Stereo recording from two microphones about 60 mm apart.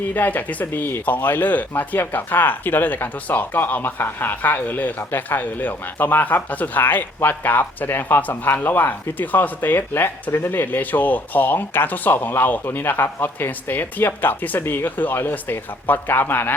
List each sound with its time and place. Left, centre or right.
0.0 s speech: left